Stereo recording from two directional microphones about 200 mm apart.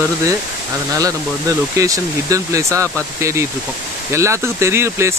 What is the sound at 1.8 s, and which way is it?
Speech, 15° right (ahead or behind).